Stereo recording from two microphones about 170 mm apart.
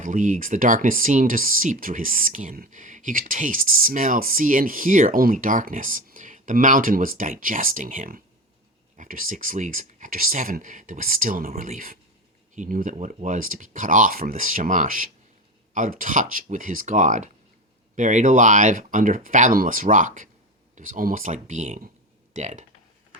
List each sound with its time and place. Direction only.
0.0 s speech: 50° right (ahead or behind)